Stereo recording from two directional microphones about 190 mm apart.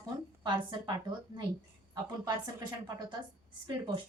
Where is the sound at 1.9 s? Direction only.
20° right (ahead or behind).